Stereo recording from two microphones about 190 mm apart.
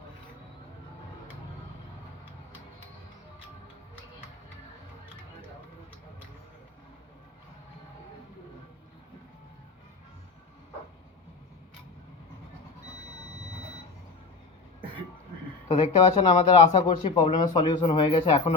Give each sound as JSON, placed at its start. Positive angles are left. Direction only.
{"t": 15.7, "sound": "speech", "side_deg": 35}